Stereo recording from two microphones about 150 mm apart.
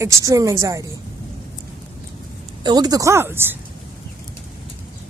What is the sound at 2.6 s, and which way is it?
Speech, 25° right (ahead or behind).